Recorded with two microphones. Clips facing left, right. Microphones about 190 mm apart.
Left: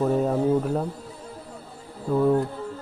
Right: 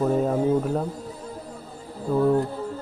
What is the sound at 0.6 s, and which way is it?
Speech, centre (ahead or behind).